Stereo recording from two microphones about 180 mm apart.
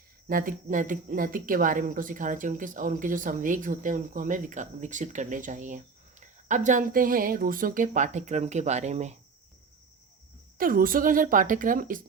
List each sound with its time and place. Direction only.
0.3 s speech: 50° right (ahead or behind)
10.6 s speech: 50° right (ahead or behind)